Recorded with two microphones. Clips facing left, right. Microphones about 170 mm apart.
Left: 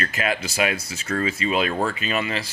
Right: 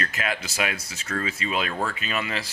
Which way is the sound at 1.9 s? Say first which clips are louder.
Left 4 dB; 5° left (ahead or behind).